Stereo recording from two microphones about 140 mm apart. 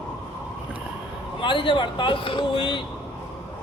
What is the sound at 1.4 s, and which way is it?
Speech, 35° left (ahead or behind).